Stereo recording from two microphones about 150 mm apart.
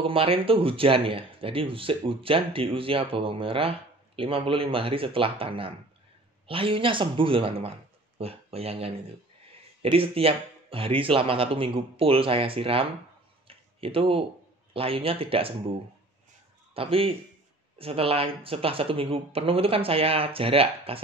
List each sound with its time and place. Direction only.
0.0 s speech: 35° right (ahead or behind)
13.5 s a sound: 40° right (ahead or behind)
14.7 s speech: 40° right (ahead or behind)
16.7 s speech: 40° right (ahead or behind)